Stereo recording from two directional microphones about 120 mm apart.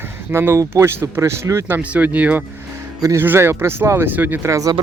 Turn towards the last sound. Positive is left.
turn(degrees=-30)  # may be behind; listen again after turning